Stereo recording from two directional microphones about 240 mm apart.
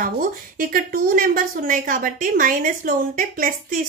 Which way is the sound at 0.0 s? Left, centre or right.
Right.